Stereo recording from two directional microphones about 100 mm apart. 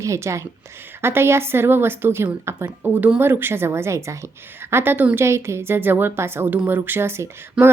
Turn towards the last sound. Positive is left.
turn(degrees=-10)  # may be behind; listen again after turning